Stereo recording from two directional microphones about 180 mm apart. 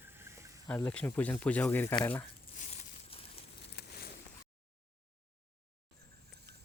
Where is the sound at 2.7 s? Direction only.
35° left (ahead or behind).